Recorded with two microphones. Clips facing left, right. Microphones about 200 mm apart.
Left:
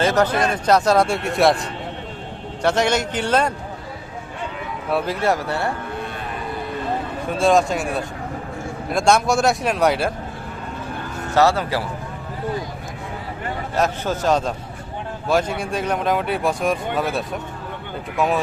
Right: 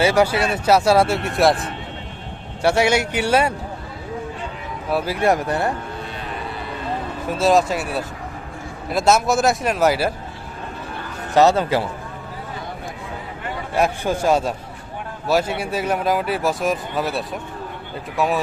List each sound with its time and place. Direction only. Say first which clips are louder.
0.0 s speech: right 1 dB; 10° right (ahead or behind)
4.9 s speech: even; centre (ahead or behind)
5.2 s speech: right 2 dB; 15° right (ahead or behind)
7.3 s speech: even; 5° right (ahead or behind)
11.3 s a man's voice: right 3 dB; 20° right (ahead or behind)
13.7 s speech: right 2 dB; 10° right (ahead or behind)